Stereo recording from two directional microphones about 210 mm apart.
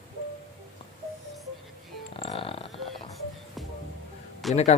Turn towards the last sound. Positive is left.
turn(degrees=30)  # may be behind; listen again after turning